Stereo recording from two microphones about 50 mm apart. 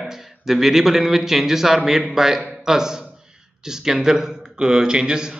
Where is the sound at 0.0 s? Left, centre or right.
Centre.